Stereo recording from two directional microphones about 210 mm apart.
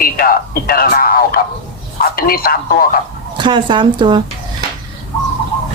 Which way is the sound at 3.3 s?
20° right (ahead or behind).